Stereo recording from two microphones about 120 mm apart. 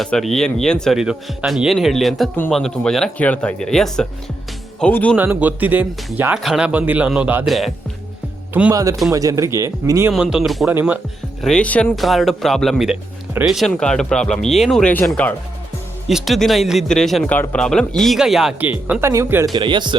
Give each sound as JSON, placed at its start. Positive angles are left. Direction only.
{"t": 0.0, "sound": "speech", "side_deg": 0}
{"t": 5.1, "sound": "speech", "side_deg": -15}
{"t": 7.4, "sound": "speech", "side_deg": 0}
{"t": 8.7, "sound": "speech", "side_deg": -30}
{"t": 10.1, "sound": "speech", "side_deg": -5}
{"t": 10.7, "sound": "speech", "side_deg": -15}
{"t": 11.4, "sound": "speech", "side_deg": 10}
{"t": 16.0, "sound": "speech", "side_deg": 0}
{"t": 18.6, "sound": "speech", "side_deg": -15}
{"t": 19.5, "sound": "speech", "side_deg": -40}